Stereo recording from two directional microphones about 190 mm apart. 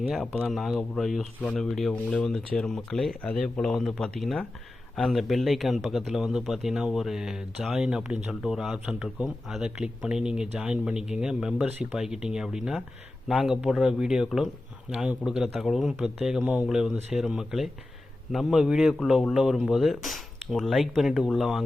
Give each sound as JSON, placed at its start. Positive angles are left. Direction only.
{"t": 0.1, "sound": "speech", "side_deg": 0}